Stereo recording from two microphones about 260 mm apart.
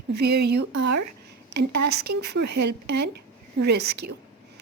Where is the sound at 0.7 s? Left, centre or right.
Right.